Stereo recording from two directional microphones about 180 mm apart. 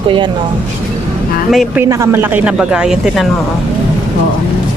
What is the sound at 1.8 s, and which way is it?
Speech, 15° right (ahead or behind).